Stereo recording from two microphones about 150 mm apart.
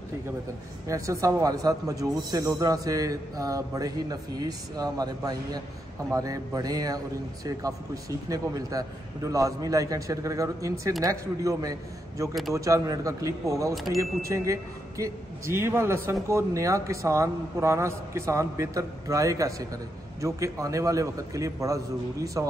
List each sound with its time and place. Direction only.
0.8 s a man's voice: 20° right (ahead or behind)
13.7 s speech: centre (ahead or behind)
14.2 s a man's voice: 20° right (ahead or behind)